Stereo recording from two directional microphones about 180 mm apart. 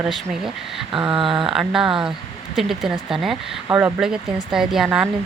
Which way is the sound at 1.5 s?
5° right (ahead or behind).